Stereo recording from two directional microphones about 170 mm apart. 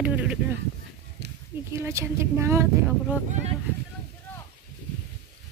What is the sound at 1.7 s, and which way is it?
Speech, 15° right (ahead or behind).